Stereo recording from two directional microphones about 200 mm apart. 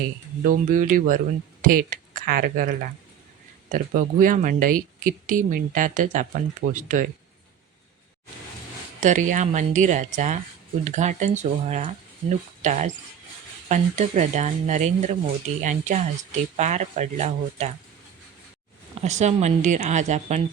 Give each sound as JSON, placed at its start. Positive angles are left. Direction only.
{"t": 0.4, "sound": "speech", "side_deg": -40}
{"t": 9.0, "sound": "speech", "side_deg": -40}
{"t": 19.0, "sound": "speech", "side_deg": -35}